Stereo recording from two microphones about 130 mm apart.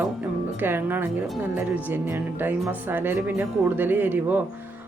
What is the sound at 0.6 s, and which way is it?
Speech, 15° right (ahead or behind).